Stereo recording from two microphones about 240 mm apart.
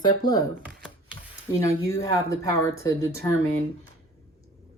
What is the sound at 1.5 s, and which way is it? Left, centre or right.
Speech, centre.